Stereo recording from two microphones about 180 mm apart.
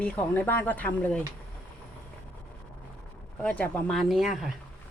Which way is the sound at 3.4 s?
5° left (ahead or behind).